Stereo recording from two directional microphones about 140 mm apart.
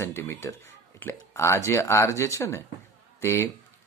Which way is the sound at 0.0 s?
20° left (ahead or behind).